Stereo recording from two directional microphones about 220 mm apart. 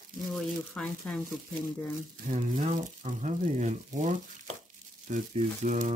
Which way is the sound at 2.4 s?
30° right (ahead or behind).